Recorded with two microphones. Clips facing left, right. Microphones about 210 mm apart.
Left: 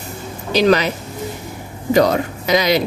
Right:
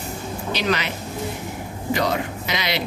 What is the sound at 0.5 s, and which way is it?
Speech, 40° left (ahead or behind).